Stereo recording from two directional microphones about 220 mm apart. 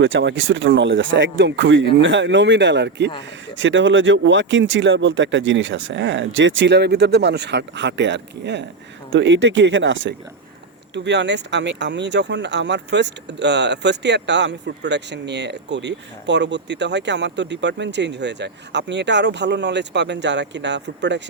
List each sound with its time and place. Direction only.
0.0 s speech: 55° right (ahead or behind)